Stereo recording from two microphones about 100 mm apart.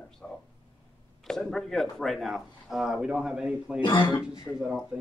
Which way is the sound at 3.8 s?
50° left (ahead or behind).